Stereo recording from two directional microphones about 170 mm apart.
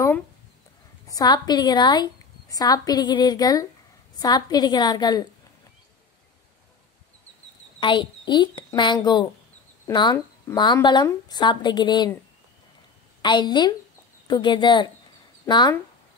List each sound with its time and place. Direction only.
1.1 s a woman's voice: 25° left (ahead or behind)
7.8 s a child's voice: 30° left (ahead or behind)
13.2 s a woman's voice: 25° left (ahead or behind)